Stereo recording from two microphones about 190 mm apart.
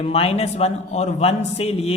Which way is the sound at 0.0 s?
30° left (ahead or behind).